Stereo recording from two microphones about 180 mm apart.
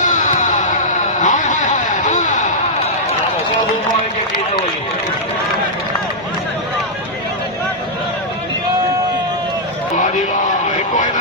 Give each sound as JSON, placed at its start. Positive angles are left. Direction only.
{"t": 0.0, "sound": "music", "side_deg": 40}
{"t": 10.7, "sound": "vehicle", "side_deg": 45}